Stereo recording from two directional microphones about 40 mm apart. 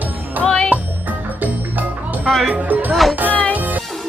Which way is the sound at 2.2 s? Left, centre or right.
Centre.